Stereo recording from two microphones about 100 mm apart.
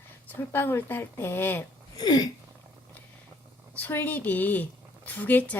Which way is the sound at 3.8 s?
20° left (ahead or behind).